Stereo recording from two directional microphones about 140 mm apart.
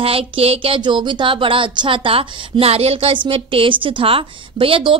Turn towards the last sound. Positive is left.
turn(degrees=-40)  # may be behind; listen again after turning